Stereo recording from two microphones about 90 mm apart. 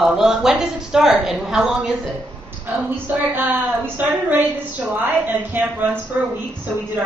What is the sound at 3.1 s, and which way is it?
A woman's voice, 20° right (ahead or behind).